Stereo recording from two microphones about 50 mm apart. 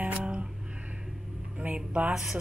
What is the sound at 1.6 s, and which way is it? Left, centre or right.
Speech, right.